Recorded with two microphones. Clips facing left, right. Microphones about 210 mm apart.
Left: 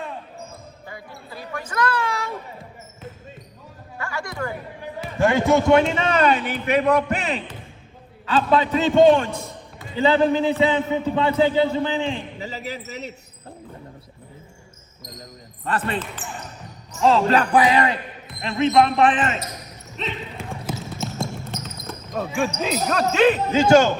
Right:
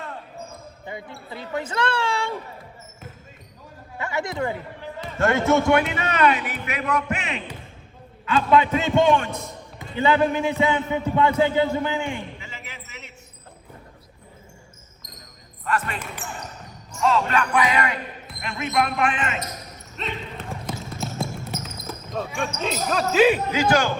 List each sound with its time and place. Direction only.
0.9 s basketball bounce: 25° right (ahead or behind)
3.9 s a sound: 20° right (ahead or behind)
4.8 s a man's voice: 15° left (ahead or behind); by 12.1 s 30° left (ahead or behind)
12.4 s a sound: 35° left (ahead or behind)
15.0 s basketball bounce: 35° left (ahead or behind)
15.6 s speech: 30° left (ahead or behind)
17.0 s speech: 30° left (ahead or behind)
20.0 s speech: centre (ahead or behind)
20.5 s basketball bounce: centre (ahead or behind)
22.4 s speech: centre (ahead or behind)
23.5 s speech: 25° left (ahead or behind)